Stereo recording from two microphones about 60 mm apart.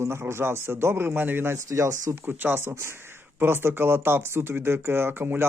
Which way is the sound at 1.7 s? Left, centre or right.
Right.